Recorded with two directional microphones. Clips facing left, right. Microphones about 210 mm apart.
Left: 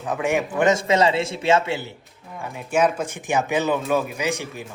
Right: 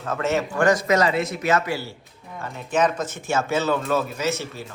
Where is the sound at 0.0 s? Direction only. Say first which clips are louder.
Left 1 dB; 15° left (ahead or behind).